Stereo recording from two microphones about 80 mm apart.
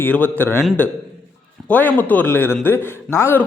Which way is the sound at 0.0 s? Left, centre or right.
Left.